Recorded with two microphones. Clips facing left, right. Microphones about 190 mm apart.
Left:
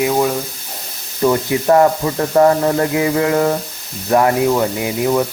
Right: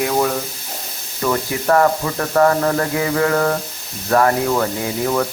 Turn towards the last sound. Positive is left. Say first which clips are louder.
# left 3 dB
turn(degrees=15)  # may be behind; listen again after turning